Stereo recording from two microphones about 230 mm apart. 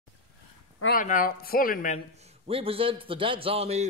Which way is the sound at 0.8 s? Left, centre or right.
Left.